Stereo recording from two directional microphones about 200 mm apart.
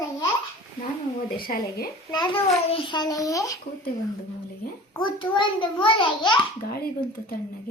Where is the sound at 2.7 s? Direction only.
25° left (ahead or behind).